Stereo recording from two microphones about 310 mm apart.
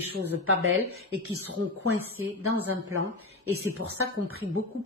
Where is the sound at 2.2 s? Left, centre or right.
Right.